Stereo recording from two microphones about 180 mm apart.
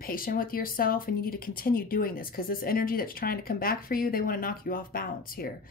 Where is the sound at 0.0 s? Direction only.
50° left (ahead or behind).